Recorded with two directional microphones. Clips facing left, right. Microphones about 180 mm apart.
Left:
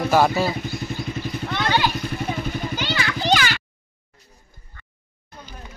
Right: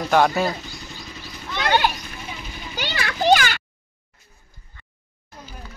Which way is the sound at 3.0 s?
55° right (ahead or behind).